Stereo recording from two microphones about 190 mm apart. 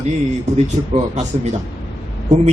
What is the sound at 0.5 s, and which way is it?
Speech, 35° right (ahead or behind).